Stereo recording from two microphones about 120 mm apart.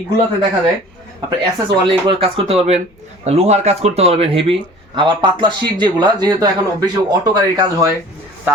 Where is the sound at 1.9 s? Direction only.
45° right (ahead or behind).